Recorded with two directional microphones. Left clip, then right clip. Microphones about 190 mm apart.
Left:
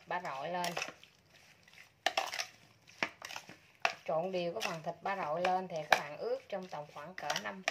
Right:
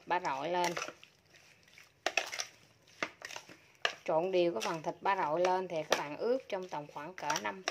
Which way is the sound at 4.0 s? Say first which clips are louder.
Right 5 dB; 60° right (ahead or behind).